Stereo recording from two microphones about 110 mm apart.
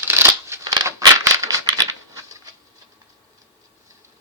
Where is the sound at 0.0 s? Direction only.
20° right (ahead or behind).